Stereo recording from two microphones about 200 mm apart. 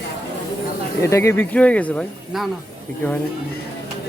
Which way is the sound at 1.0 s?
15° left (ahead or behind).